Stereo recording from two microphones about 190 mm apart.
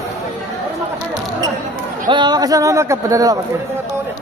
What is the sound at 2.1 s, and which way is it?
Speech, 25° right (ahead or behind).